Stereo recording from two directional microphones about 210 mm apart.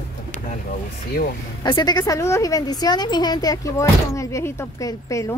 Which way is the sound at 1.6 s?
20° left (ahead or behind).